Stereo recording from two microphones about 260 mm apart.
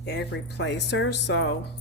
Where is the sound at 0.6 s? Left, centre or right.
Left.